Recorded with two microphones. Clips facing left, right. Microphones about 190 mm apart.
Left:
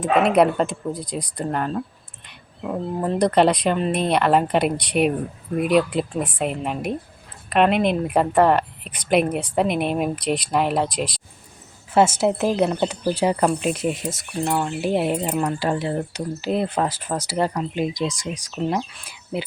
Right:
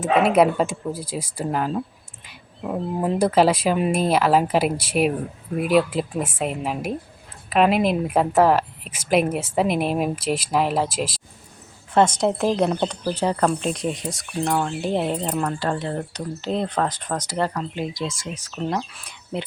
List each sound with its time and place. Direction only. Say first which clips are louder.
0.0 s a woman's voice: even; 5° right (ahead or behind)
11.9 s a woman's voice: left 1 dB; 5° left (ahead or behind)